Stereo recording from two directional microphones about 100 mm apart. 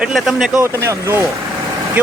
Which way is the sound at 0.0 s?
5° right (ahead or behind).